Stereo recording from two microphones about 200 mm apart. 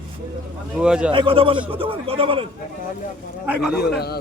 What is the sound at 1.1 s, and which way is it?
Speech, 25° right (ahead or behind).